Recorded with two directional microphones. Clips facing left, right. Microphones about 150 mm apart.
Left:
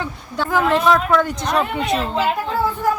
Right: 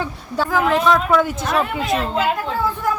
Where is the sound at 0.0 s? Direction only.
5° right (ahead or behind).